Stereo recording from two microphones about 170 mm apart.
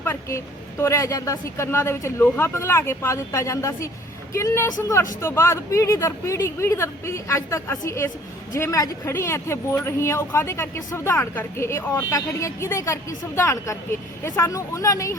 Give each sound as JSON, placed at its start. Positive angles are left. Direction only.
{"t": 0.0, "sound": "speech", "side_deg": 15}